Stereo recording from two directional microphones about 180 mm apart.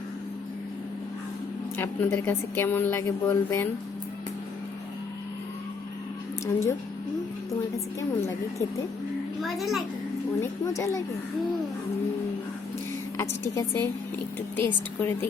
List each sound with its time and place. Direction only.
1.7 s a woman's voice: 10° left (ahead or behind)
6.4 s a woman's voice: 15° left (ahead or behind)
9.4 s a child's voice: centre (ahead or behind)
10.4 s a woman's voice: 15° left (ahead or behind)
13.1 s a woman's voice: 15° left (ahead or behind)